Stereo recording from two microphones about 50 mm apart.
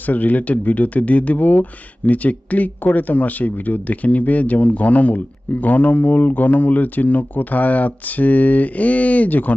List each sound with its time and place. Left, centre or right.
0.0 s speech: left